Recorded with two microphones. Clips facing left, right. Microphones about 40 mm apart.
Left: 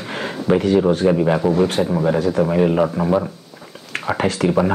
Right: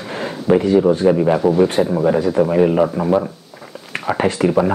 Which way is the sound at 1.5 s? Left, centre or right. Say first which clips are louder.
Right 2 dB; right.